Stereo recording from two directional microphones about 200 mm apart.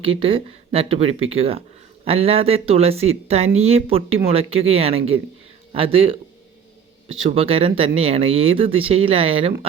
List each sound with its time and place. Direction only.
0.0 s speech: 30° right (ahead or behind)
7.3 s speech: 30° right (ahead or behind)